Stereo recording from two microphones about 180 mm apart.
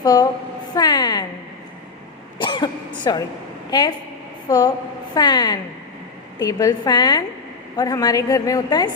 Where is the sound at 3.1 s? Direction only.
20° left (ahead or behind).